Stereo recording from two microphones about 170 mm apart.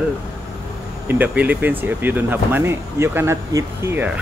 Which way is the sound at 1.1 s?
10° right (ahead or behind).